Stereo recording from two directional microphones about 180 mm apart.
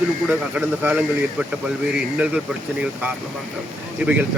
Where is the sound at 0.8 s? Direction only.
5° right (ahead or behind).